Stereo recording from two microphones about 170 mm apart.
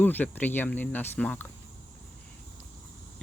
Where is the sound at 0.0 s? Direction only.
10° left (ahead or behind).